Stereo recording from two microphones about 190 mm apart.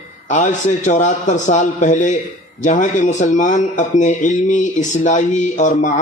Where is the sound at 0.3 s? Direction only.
40° left (ahead or behind).